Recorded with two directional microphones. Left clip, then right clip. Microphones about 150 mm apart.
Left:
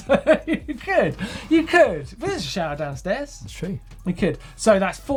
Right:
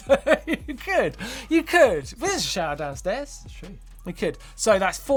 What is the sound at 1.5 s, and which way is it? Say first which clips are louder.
Speech: left 2 dB; 50° right (ahead or behind).